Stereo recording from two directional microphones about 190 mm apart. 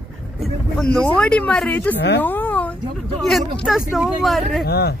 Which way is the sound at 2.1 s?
10° left (ahead or behind).